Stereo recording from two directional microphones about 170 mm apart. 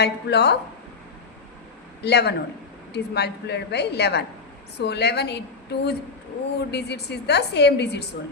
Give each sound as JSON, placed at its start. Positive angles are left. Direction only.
{"t": 0.0, "sound": "speech", "side_deg": 75}
{"t": 2.0, "sound": "a woman's voice", "side_deg": 80}